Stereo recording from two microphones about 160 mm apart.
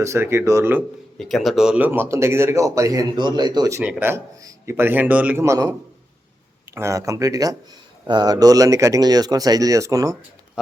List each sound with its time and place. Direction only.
0.0 s speech: 15° right (ahead or behind)
1.2 s speech: centre (ahead or behind); by 3.8 s 25° right (ahead or behind)
3.8 s speech: 15° right (ahead or behind)
6.7 s speech: 20° right (ahead or behind)